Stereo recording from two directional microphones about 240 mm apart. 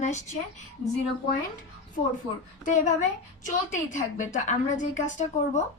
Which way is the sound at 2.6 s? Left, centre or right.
Left.